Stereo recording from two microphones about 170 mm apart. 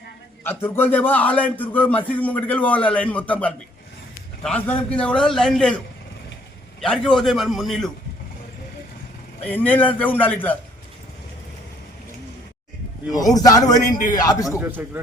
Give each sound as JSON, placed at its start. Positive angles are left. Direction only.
{"t": 0.4, "sound": "a man's voice", "side_deg": 10}
{"t": 6.8, "sound": "a man's voice", "side_deg": 0}
{"t": 9.5, "sound": "a man's voice", "side_deg": 10}
{"t": 13.1, "sound": "a man's voice", "side_deg": 20}
{"t": 14.6, "sound": "speech", "side_deg": -10}